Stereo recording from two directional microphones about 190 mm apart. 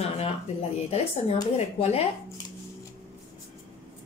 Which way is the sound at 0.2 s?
30° left (ahead or behind).